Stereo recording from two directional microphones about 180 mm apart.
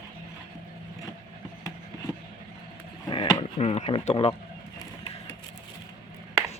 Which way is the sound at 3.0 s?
25° left (ahead or behind).